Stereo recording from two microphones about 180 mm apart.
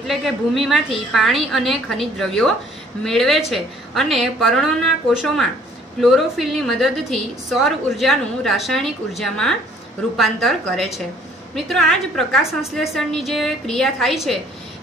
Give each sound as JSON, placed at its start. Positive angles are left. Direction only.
{"t": 0.0, "sound": "a woman's voice", "side_deg": 0}